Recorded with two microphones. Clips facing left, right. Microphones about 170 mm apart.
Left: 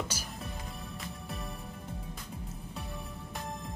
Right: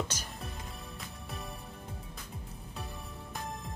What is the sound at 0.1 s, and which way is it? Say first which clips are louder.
Music: left 2 dB; 10° left (ahead or behind).